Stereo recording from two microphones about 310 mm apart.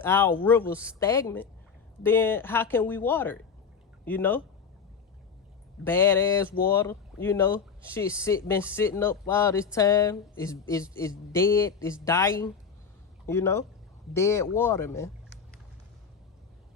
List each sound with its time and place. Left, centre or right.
0.0 s speech: centre
5.8 s speech: centre